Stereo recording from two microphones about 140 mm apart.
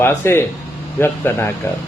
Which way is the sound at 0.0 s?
15° left (ahead or behind).